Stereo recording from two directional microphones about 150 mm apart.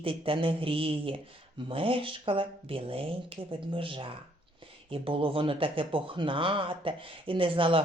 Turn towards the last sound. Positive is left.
turn(degrees=-35)  # may be behind; listen again after turning